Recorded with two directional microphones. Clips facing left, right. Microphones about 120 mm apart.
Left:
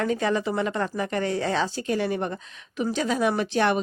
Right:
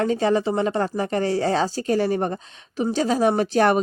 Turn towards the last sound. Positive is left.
turn(degrees=-40)  # may be behind; listen again after turning